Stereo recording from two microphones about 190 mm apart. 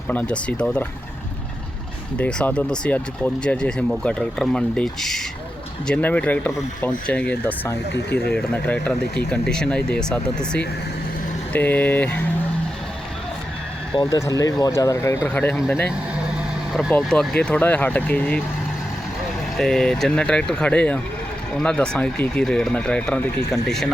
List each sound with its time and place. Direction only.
0.1 s speech: 5° left (ahead or behind)
2.1 s speech: 5° left (ahead or behind)
13.9 s speech: 20° left (ahead or behind)
16.7 s speech: centre (ahead or behind)
19.5 s speech: 5° left (ahead or behind)